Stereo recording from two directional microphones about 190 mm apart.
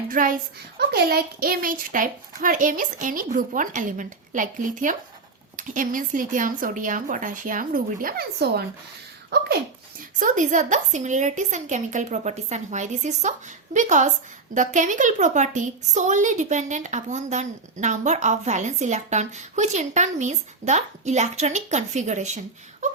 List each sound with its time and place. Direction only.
0.1 s speech: 45° right (ahead or behind)
10.2 s a woman's voice: 45° right (ahead or behind)